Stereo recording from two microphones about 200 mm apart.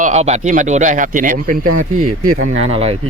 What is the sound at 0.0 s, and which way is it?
Speech, 35° right (ahead or behind).